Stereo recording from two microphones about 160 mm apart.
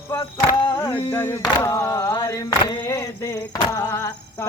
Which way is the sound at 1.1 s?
15° left (ahead or behind).